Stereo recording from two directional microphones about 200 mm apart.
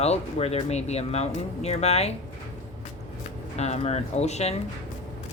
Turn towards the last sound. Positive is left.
turn(degrees=35)  # may be behind; listen again after turning